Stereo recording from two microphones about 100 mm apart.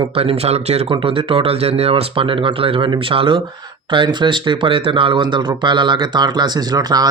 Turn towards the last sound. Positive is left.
turn(degrees=-40)  # may be behind; listen again after turning